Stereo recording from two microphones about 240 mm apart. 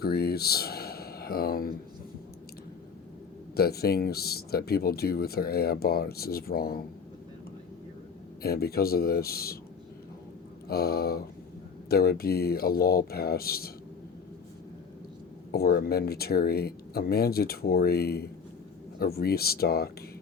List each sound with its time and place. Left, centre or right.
0.0 s speech: left
3.5 s speech: left
8.4 s speech: left
10.7 s speech: left
15.5 s speech: left